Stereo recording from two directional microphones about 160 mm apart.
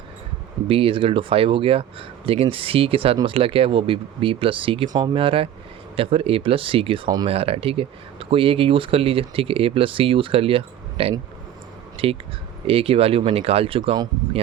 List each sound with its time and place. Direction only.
0.7 s speech: 35° right (ahead or behind)